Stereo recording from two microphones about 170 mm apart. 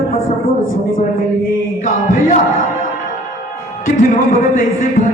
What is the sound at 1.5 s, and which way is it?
Speech, 50° left (ahead or behind).